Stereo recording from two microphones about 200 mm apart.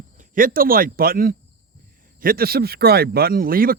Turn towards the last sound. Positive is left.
turn(degrees=-45)  # may be behind; listen again after turning